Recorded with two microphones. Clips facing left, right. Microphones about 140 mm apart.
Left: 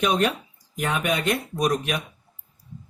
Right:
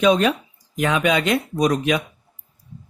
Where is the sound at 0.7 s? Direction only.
90° right.